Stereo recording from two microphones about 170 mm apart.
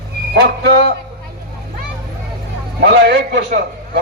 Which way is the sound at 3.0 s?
65° right (ahead or behind).